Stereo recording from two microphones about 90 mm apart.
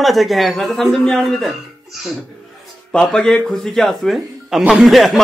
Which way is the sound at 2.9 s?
10° left (ahead or behind).